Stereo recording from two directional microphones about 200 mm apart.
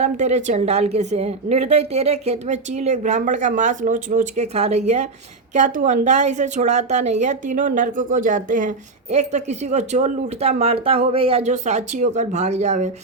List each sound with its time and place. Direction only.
0.0 s a woman's voice: 35° right (ahead or behind)